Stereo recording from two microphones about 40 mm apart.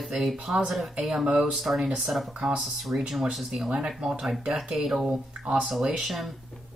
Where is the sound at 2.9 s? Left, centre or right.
Right.